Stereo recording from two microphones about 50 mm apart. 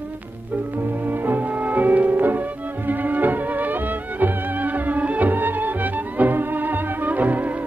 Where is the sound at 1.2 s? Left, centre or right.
Right.